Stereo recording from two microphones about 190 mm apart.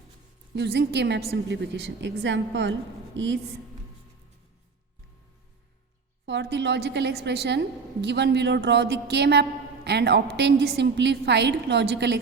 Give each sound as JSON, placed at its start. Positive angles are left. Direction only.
{"t": 0.5, "sound": "a woman's voice", "side_deg": -60}
{"t": 6.2, "sound": "a woman's voice", "side_deg": -65}